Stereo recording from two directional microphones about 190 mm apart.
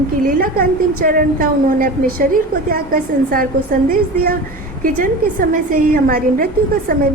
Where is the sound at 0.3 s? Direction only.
45° right (ahead or behind).